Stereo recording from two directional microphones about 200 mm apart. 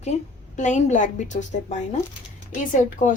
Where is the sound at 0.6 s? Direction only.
35° left (ahead or behind).